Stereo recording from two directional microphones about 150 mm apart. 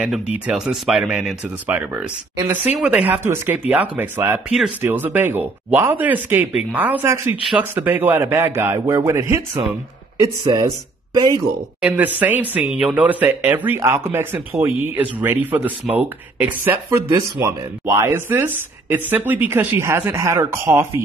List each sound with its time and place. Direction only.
0.3 s speech: 5° right (ahead or behind)
10.2 s speech: 25° right (ahead or behind)
11.8 s speech: 10° right (ahead or behind)